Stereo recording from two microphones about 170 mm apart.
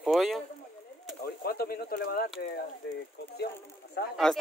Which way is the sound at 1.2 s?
65° left (ahead or behind).